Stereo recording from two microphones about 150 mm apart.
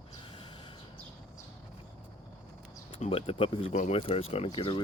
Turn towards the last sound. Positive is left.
turn(degrees=35)  # may be behind; listen again after turning